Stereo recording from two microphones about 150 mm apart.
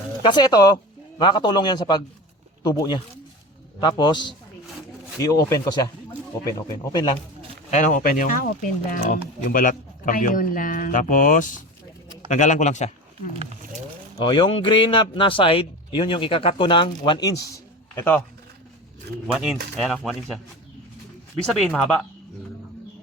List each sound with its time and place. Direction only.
0.2 s a man's voice: 30° left (ahead or behind)
7.7 s a man's voice: 55° left (ahead or behind)
14.2 s speech: 30° left (ahead or behind); by 18.2 s 15° left (ahead or behind)
19.3 s speech: centre (ahead or behind)
21.4 s speech: centre (ahead or behind)